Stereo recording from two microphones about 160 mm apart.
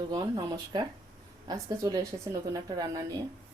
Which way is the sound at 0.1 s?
25° right (ahead or behind).